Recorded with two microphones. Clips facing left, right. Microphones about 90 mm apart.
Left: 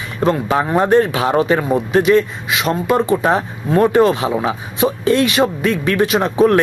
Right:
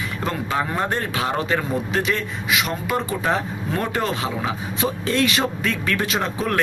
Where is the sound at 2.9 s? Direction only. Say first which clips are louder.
Left 7 dB; 55° left (ahead or behind).